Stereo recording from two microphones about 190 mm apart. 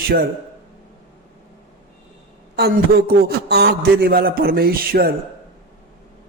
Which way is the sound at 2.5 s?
55° right (ahead or behind).